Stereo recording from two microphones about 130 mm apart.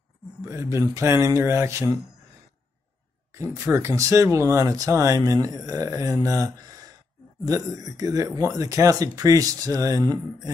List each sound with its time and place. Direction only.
0.4 s speech: 20° right (ahead or behind)
3.3 s speech: 20° right (ahead or behind)